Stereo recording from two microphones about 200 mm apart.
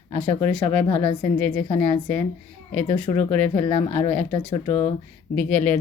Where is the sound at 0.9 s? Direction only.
30° left (ahead or behind).